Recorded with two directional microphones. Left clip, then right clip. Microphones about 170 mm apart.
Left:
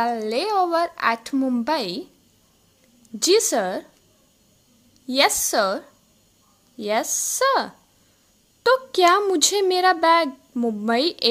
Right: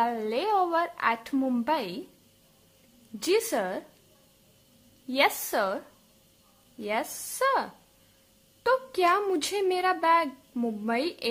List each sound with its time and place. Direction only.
0.0 s a child's voice: 20° left (ahead or behind)
3.2 s a child's voice: 30° left (ahead or behind)
5.0 s a child's voice: 25° left (ahead or behind)